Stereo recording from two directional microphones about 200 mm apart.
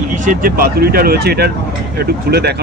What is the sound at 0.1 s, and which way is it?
Speech, 40° right (ahead or behind).